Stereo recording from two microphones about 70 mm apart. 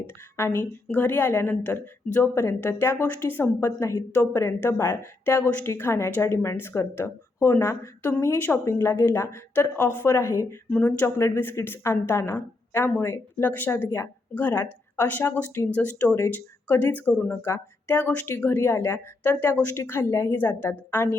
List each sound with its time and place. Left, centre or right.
0.4 s a woman's voice: left
0.9 s speech: left
3.7 s a woman's voice: left
4.1 s a woman's voice: left
5.6 s a woman's voice: left
6.3 s a woman's voice: left
10.7 s speech: centre
11.0 s a woman's voice: left
20.3 s speech: left